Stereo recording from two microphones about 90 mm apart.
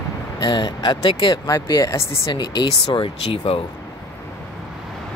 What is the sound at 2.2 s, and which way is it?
Speech, 55° left (ahead or behind).